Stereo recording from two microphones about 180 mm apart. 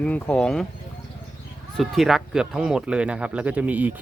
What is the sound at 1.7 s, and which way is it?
Speech, centre (ahead or behind).